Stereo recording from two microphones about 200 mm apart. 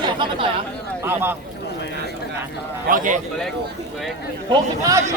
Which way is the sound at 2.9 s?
40° right (ahead or behind).